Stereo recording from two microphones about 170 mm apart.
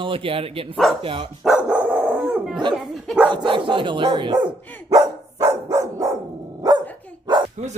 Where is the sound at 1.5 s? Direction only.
10° right (ahead or behind).